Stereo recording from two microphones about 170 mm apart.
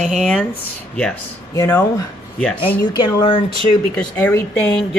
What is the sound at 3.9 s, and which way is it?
Speech, 10° left (ahead or behind).